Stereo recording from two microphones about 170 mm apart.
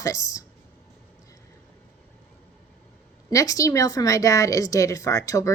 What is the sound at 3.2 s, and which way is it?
Speech, 20° left (ahead or behind).